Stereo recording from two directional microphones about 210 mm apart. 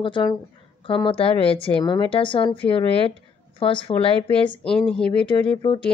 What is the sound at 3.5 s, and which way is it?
A woman's voice, 25° left (ahead or behind).